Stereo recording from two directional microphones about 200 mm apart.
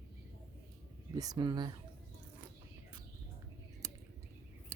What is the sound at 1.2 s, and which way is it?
Speech, 20° right (ahead or behind).